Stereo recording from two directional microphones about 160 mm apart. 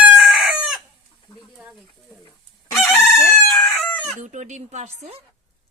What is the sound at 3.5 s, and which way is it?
Chicken, 5° left (ahead or behind).